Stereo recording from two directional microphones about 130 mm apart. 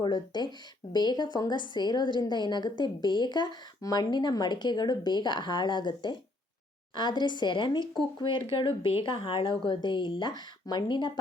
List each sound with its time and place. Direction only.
0.0 s a woman's voice: 35° left (ahead or behind)